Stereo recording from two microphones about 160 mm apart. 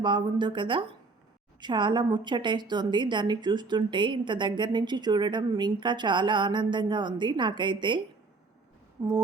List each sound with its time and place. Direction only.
0.0 s a woman's voice: 30° right (ahead or behind)